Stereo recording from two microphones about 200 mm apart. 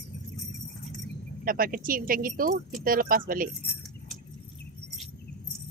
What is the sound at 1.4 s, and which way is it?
Speech, 45° right (ahead or behind).